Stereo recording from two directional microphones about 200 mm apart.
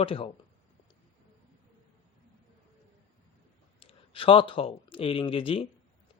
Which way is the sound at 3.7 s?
25° left (ahead or behind).